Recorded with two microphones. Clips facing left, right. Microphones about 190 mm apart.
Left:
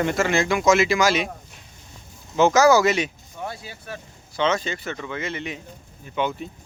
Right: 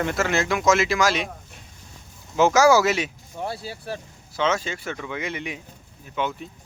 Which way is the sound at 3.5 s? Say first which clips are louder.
Right 4 dB; 30° right (ahead or behind).